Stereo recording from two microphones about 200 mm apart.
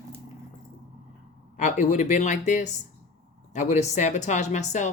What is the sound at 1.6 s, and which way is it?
Speech, 40° left (ahead or behind).